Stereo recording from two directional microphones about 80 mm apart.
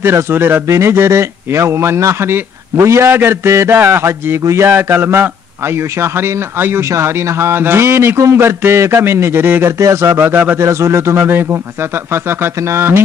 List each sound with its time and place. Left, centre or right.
0.0 s a man's voice: right
10.6 s a man's voice: right